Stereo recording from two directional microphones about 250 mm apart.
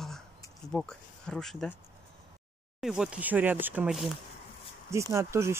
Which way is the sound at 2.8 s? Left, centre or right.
Centre.